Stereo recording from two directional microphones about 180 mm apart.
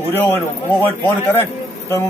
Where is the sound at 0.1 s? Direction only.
10° left (ahead or behind).